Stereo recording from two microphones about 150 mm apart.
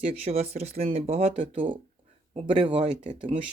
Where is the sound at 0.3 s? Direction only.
45° right (ahead or behind).